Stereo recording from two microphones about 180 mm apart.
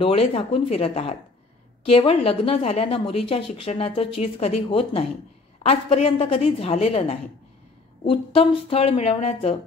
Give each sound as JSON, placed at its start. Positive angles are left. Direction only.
{"t": 0.0, "sound": "a woman's voice", "side_deg": 30}